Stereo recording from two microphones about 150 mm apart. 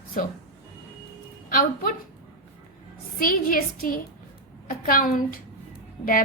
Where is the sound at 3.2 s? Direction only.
70° left (ahead or behind).